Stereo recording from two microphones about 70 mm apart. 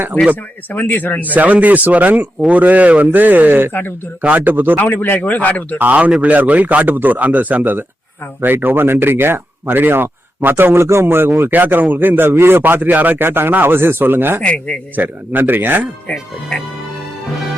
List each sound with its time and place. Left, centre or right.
0.7 s a man's voice: left
1.3 s speech: right
3.7 s a man's voice: left
4.2 s speech: right
4.8 s a man's voice: left
5.8 s speech: right
14.4 s a man's voice: centre
14.9 s speech: right